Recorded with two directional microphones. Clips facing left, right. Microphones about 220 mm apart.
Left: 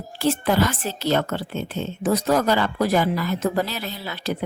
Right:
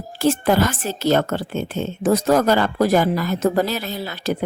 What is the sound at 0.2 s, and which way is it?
A woman's voice, 45° right (ahead or behind).